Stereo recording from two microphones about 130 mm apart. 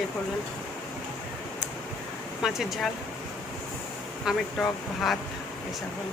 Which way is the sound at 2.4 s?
Centre (ahead or behind).